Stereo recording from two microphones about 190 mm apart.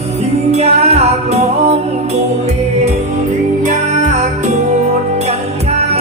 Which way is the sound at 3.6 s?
40° right (ahead or behind).